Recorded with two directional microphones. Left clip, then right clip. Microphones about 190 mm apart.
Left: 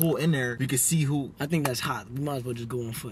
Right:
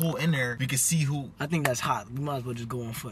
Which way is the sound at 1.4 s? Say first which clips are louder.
Right 3 dB; 5° left (ahead or behind).